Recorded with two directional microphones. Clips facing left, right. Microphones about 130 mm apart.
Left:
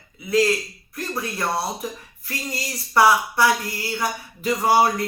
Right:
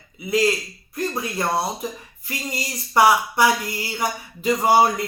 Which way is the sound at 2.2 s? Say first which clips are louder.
Right 1 dB; 20° right (ahead or behind).